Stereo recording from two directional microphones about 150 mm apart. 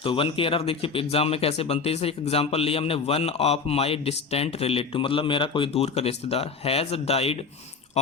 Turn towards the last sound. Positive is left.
turn(degrees=40)  # may be behind; listen again after turning